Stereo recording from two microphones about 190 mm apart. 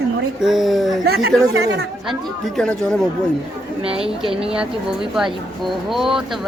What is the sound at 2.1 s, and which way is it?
Speech, 5° left (ahead or behind).